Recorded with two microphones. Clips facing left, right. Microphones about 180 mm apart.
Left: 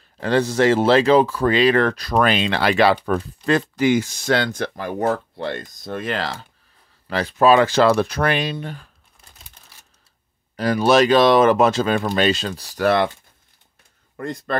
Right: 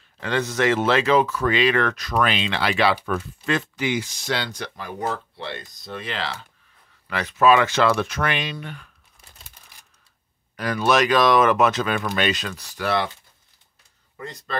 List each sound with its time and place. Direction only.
0.2 s speech: 35° left (ahead or behind)
7.1 s speech: 30° left (ahead or behind)
10.5 s speech: 30° left (ahead or behind)
12.8 s speech: 50° left (ahead or behind)
14.1 s speech: 50° left (ahead or behind)